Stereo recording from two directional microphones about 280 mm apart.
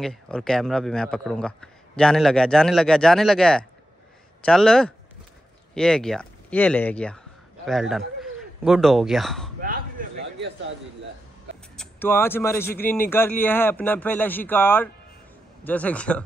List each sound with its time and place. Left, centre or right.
0.0 s speech: centre
9.6 s a sound: right
11.7 s a man's voice: centre